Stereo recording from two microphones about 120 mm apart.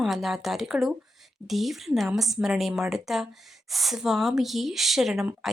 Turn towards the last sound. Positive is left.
turn(degrees=0)  # may be behind; listen again after turning